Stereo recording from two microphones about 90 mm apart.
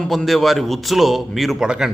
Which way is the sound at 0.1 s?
Centre (ahead or behind).